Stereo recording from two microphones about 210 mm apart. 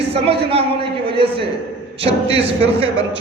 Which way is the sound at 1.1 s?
25° right (ahead or behind).